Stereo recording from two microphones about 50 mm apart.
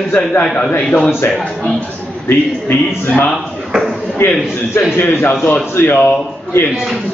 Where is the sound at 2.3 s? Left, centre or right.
Left.